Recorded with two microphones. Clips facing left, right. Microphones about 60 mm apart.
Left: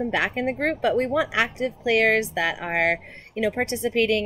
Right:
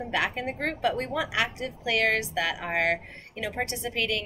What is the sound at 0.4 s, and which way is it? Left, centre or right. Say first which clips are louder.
Speech: left 5 dB; left.